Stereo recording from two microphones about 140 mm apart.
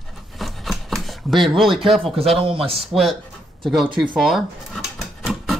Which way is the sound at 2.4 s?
40° right (ahead or behind).